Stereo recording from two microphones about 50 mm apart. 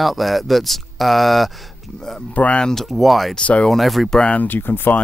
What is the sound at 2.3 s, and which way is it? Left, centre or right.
Speech, left.